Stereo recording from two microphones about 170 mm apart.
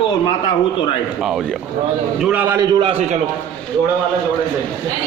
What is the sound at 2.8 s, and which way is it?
Speech, 30° right (ahead or behind).